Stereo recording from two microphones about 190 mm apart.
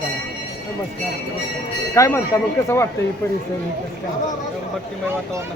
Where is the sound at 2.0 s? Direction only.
15° left (ahead or behind).